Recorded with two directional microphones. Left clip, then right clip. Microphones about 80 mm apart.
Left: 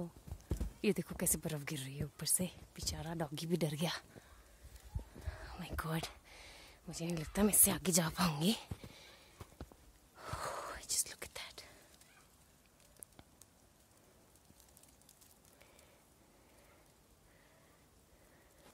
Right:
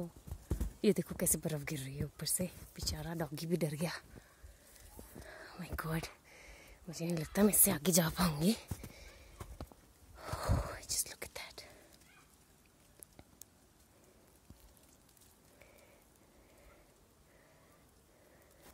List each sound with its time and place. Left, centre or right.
0.3 s clip-clop: right
0.7 s speech: centre
1.0 s speech: centre
2.1 s speech: centre; by 4.0 s left
5.6 s whispering: centre
7.1 s speech: centre
7.4 s speech: centre
7.8 s speech: centre
8.4 s a sound: centre
10.1 s whispering: centre